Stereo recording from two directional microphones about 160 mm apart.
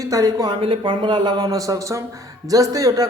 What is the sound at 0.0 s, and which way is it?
Speech, 20° right (ahead or behind).